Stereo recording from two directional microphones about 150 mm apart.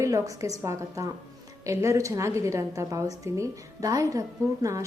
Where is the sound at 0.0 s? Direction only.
20° right (ahead or behind).